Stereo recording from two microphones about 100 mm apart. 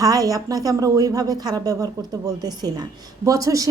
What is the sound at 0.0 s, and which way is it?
A woman's voice, 35° right (ahead or behind).